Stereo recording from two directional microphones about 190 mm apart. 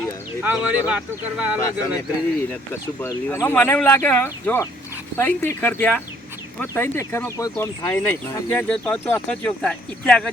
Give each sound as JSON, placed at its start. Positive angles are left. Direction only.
{"t": 0.4, "sound": "speech", "side_deg": -5}
{"t": 3.0, "sound": "speech", "side_deg": 15}